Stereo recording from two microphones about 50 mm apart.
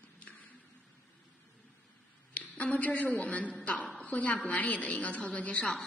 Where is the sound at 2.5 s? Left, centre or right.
Left.